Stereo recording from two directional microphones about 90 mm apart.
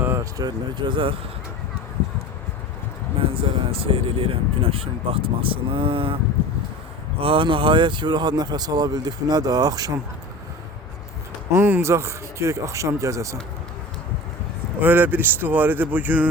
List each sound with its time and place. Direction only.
0.2 s speech: 45° right (ahead or behind); by 1.1 s 65° right (ahead or behind)
3.2 s a sound: 90° right
3.7 s speech: 90° right
7.2 s speech: 80° right; by 9.9 s 45° right (ahead or behind)
11.5 s speech: 25° right (ahead or behind)
14.8 s speech: 20° right (ahead or behind)